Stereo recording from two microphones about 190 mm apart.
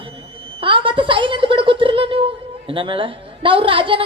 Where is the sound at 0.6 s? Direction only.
25° right (ahead or behind).